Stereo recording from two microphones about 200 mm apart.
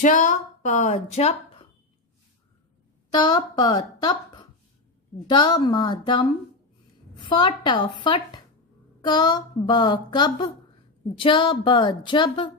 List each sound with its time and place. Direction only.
0.0 s speech: 40° left (ahead or behind)
3.1 s a woman's voice: 20° left (ahead or behind)